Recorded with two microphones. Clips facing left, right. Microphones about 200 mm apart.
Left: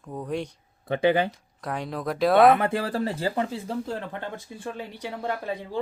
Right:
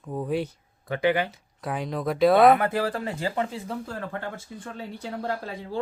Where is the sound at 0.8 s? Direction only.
25° left (ahead or behind).